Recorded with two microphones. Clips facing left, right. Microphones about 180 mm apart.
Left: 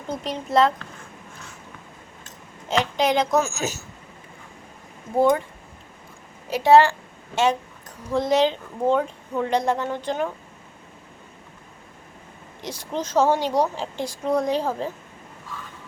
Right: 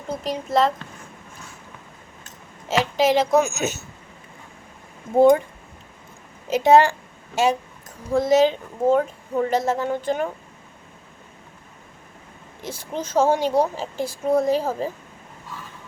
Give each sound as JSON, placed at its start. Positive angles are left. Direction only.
{"t": 0.1, "sound": "a woman's voice", "side_deg": 0}
{"t": 2.6, "sound": "a woman's voice", "side_deg": -5}
{"t": 3.4, "sound": "speech", "side_deg": -20}
{"t": 6.7, "sound": "a woman's voice", "side_deg": -15}
{"t": 12.6, "sound": "speech", "side_deg": -5}